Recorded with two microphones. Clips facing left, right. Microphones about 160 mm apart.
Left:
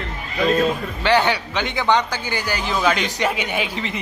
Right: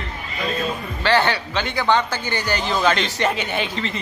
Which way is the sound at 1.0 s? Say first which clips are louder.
Left 1 dB; 15° left (ahead or behind).